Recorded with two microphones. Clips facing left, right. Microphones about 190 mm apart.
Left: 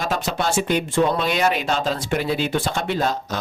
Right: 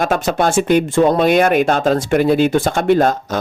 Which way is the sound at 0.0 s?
50° right (ahead or behind).